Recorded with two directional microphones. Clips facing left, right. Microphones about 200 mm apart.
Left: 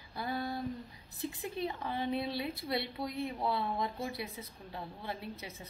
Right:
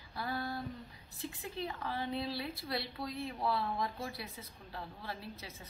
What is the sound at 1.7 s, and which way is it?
A woman's voice, 20° left (ahead or behind).